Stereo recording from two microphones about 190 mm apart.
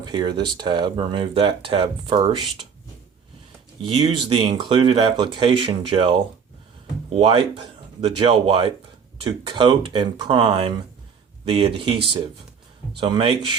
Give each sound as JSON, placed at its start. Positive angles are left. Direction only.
{"t": 0.0, "sound": "speech", "side_deg": -25}
{"t": 3.8, "sound": "speech", "side_deg": -25}